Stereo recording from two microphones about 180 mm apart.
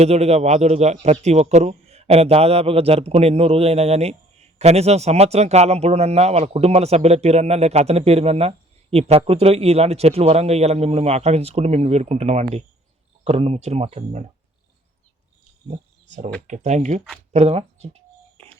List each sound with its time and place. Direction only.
0.0 s speech: 35° right (ahead or behind)
15.6 s a sound: 40° right (ahead or behind)
16.5 s speech: 40° right (ahead or behind)